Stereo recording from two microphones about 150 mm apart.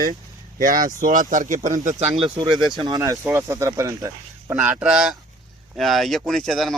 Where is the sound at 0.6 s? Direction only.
65° right (ahead or behind).